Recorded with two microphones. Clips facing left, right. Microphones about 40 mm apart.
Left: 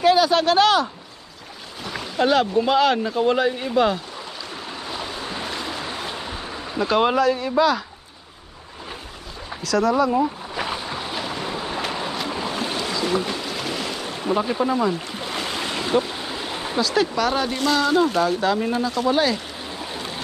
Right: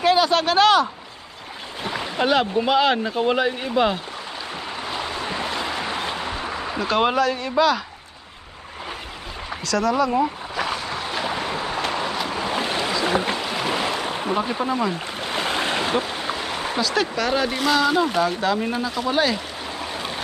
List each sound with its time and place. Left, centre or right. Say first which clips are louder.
0.0 s speech: left 1 dB; centre
1.8 s speech: left 1 dB; right
4.9 s stream: right 3 dB; right
6.8 s speech: left 2 dB; centre
7.2 s a man's voice: left 1 dB; centre
9.7 s a man's voice: left 2 dB; centre
10.5 s a sound: right 2 dB; centre
11.1 s boat: right 4 dB; centre
11.8 s vehicle: right 2 dB; centre
12.4 s boat: right 2 dB; right
14.3 s speech: left 4 dB; centre